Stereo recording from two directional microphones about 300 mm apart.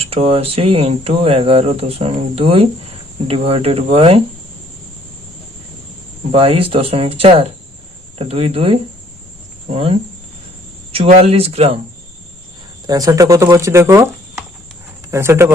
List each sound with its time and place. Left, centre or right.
0.0 s speech: centre
6.3 s speech: centre
12.9 s speech: centre